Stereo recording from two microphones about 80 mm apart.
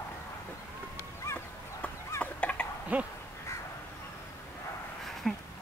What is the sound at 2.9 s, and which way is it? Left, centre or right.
Crow, centre.